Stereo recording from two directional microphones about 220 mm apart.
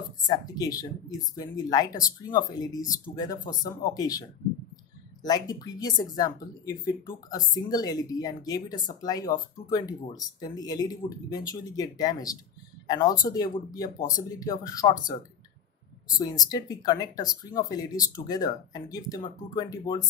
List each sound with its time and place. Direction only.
0.2 s speech: 15° left (ahead or behind)
5.2 s speech: 15° left (ahead or behind)
16.2 s speech: 15° left (ahead or behind)